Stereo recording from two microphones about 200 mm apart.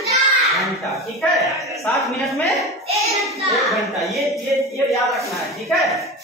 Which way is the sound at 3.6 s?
Centre (ahead or behind).